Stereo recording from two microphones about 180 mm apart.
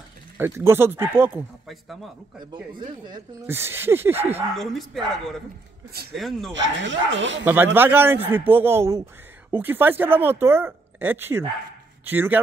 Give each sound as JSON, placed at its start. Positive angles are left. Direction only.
{"t": 0.4, "sound": "speech", "side_deg": -15}
{"t": 1.7, "sound": "speech", "side_deg": 0}
{"t": 3.4, "sound": "speech", "side_deg": -15}
{"t": 4.6, "sound": "speech", "side_deg": 0}
{"t": 6.1, "sound": "speech", "side_deg": 0}
{"t": 6.6, "sound": "speech", "side_deg": -90}
{"t": 7.4, "sound": "a man's voice", "side_deg": -10}